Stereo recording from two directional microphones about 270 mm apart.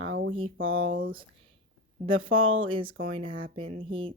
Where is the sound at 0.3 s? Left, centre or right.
Centre.